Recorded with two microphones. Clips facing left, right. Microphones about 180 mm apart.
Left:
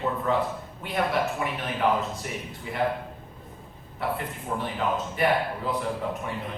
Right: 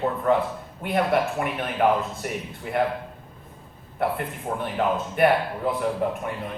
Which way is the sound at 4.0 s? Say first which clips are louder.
Right 4 dB; 55° right (ahead or behind).